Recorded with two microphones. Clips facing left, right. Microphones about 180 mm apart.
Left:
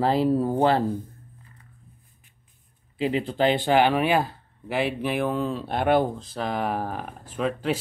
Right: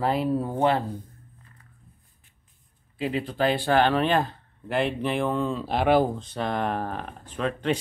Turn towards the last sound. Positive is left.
turn(degrees=5)  # may be behind; listen again after turning